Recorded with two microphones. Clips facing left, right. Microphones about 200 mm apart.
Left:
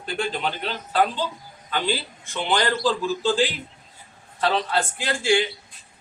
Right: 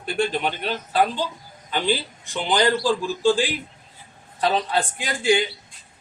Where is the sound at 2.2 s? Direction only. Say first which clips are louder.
Right 3 dB; 15° right (ahead or behind).